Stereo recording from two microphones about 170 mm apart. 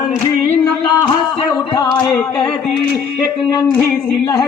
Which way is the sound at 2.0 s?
20° left (ahead or behind).